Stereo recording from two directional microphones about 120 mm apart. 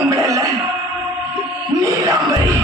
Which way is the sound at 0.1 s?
25° right (ahead or behind).